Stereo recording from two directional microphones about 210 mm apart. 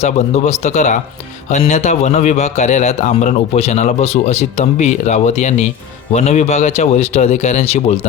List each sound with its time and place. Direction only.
0.0 s a man's voice: 30° left (ahead or behind)